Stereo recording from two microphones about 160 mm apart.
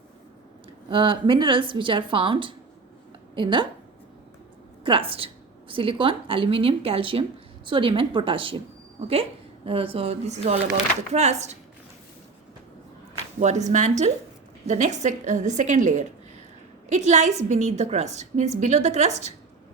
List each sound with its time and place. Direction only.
0.9 s speech: 30° right (ahead or behind)
4.8 s a woman's voice: 35° right (ahead or behind)
13.4 s a woman's voice: 45° right (ahead or behind)